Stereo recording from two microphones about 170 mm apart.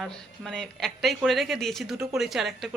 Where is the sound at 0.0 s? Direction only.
5° left (ahead or behind).